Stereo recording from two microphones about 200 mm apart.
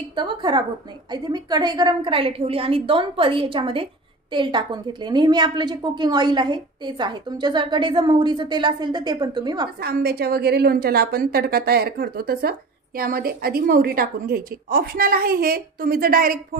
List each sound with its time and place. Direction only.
0.1 s a woman's voice: 25° right (ahead or behind)
9.8 s a woman's voice: 50° right (ahead or behind)